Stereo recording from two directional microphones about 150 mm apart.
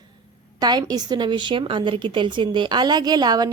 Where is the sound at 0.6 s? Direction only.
25° right (ahead or behind).